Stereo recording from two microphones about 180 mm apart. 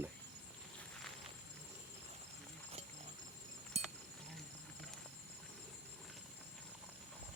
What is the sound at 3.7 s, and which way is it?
Livestock, 35° right (ahead or behind).